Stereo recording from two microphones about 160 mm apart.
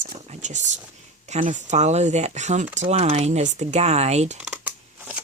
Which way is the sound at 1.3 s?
50° right (ahead or behind).